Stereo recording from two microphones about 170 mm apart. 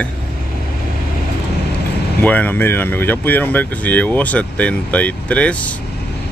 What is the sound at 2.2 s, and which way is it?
Speech, 10° left (ahead or behind).